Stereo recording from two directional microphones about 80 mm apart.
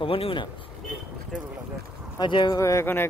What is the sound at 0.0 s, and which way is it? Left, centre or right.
Speech, left.